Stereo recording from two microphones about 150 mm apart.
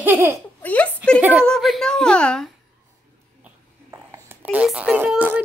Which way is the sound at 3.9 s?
15° right (ahead or behind).